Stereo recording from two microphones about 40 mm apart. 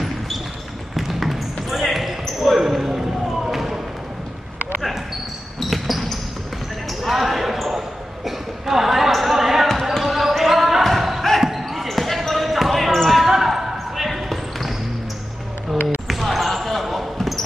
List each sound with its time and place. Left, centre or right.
0.9 s basketball bounce: centre
5.6 s basketball bounce: centre
15.7 s basketball bounce: centre